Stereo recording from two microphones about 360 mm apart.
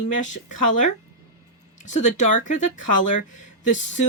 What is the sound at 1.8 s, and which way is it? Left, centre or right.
Speech, centre.